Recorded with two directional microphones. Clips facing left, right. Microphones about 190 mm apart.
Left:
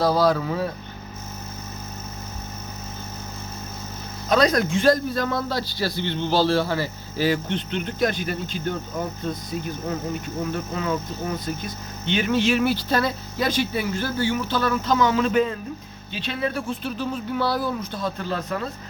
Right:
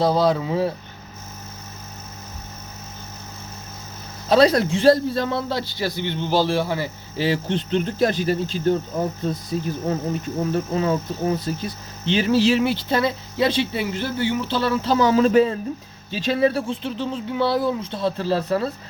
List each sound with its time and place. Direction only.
0.0 s a man's voice: 25° right (ahead or behind)
4.3 s a man's voice: 30° right (ahead or behind)